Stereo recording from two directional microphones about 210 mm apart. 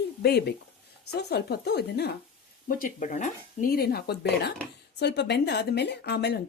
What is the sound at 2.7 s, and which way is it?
Speech, 40° left (ahead or behind).